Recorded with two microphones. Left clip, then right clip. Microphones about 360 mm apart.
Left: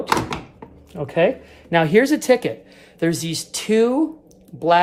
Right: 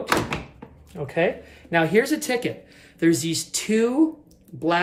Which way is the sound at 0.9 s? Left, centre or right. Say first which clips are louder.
Left 5 dB; left.